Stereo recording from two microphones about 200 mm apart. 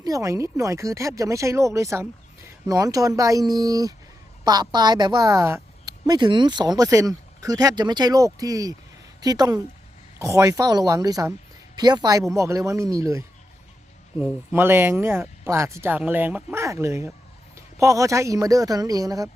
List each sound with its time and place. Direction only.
0.0 s a woman's voice: 15° right (ahead or behind)